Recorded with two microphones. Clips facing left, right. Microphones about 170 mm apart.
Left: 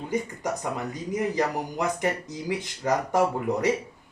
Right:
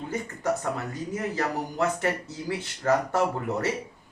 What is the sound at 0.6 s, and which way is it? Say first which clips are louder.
Speech: even; 15° left (ahead or behind).